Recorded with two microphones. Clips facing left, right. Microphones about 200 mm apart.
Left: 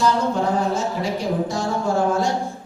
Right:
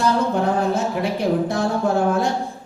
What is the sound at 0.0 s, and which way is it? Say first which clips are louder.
Music: right 1 dB; 60° right (ahead or behind).